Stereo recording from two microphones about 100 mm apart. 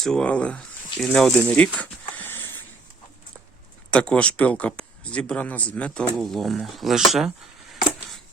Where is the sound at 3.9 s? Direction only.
10° left (ahead or behind).